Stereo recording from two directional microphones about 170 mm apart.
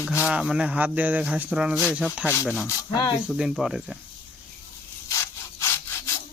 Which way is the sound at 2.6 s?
25° left (ahead or behind).